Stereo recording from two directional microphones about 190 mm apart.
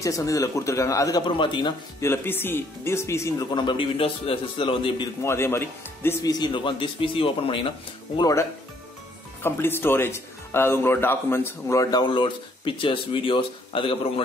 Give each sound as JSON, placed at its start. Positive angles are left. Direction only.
{"t": 0.0, "sound": "speech", "side_deg": 15}
{"t": 2.0, "sound": "speech", "side_deg": 10}
{"t": 5.2, "sound": "speech", "side_deg": 15}